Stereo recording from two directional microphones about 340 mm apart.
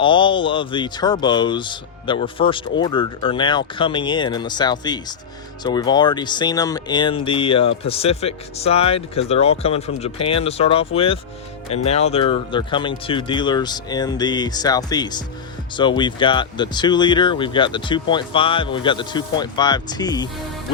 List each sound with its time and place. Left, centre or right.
0.0 s speech: centre